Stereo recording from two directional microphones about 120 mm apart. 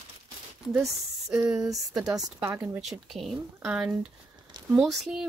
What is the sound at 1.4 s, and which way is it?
Speech, 30° right (ahead or behind).